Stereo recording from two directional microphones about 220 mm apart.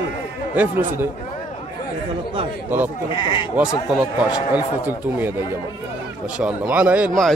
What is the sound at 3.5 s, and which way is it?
A man's voice, 5° right (ahead or behind).